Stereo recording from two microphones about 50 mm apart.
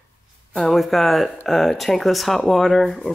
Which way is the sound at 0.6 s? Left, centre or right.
Centre.